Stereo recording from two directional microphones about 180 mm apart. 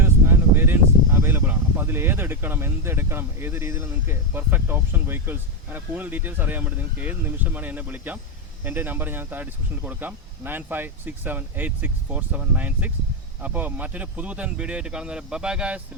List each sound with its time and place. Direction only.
0.0 s speech: 10° right (ahead or behind)